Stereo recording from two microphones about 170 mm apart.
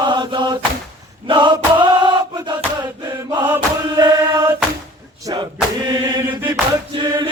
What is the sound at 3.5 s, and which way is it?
Chant, 20° right (ahead or behind).